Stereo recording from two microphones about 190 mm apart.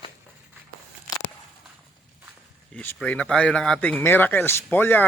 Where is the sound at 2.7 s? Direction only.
5° left (ahead or behind).